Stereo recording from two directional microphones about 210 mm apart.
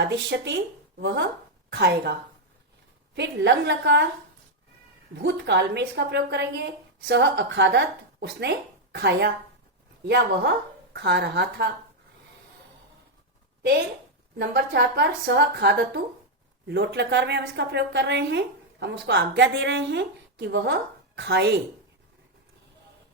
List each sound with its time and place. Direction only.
0.0 s a woman's voice: 55° right (ahead or behind)
3.2 s speech: 55° right (ahead or behind)
5.1 s a woman's voice: 55° right (ahead or behind)
13.6 s a woman's voice: 50° right (ahead or behind)